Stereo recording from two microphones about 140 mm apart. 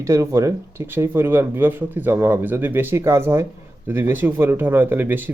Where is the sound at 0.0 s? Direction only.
20° right (ahead or behind).